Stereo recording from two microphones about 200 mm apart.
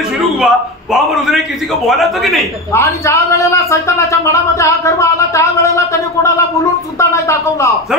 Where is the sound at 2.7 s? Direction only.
15° left (ahead or behind).